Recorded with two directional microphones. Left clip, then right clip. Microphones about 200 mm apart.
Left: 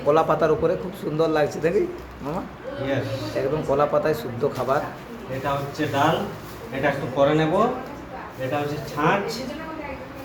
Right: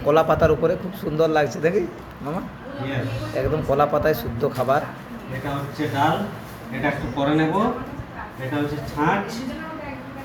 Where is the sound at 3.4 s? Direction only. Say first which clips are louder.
Right 2 dB; 5° right (ahead or behind).